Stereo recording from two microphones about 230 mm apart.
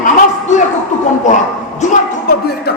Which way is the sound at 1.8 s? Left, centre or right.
Left.